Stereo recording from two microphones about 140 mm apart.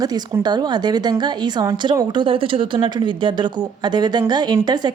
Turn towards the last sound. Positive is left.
turn(degrees=-30)  # may be behind; listen again after turning